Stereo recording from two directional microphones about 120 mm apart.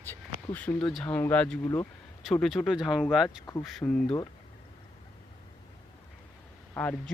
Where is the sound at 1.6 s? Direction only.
25° left (ahead or behind).